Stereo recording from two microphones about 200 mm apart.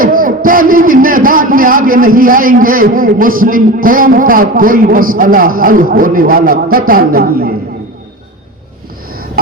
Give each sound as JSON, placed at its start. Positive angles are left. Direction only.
{"t": 0.0, "sound": "a man's voice", "side_deg": -45}